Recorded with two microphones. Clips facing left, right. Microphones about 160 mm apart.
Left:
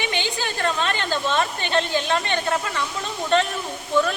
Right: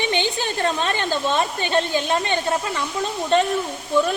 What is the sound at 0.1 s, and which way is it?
A woman's voice, 20° right (ahead or behind).